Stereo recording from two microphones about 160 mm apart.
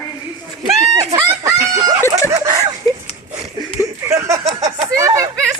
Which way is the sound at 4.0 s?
15° right (ahead or behind).